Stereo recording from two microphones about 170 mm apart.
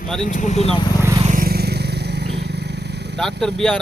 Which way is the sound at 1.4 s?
65° right (ahead or behind).